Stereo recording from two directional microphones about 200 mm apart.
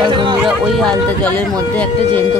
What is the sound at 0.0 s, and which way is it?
Music, 25° right (ahead or behind).